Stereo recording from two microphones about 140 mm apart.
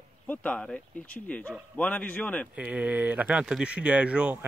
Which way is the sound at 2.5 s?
10° right (ahead or behind).